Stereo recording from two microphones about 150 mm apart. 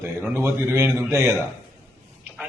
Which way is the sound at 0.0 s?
15° right (ahead or behind).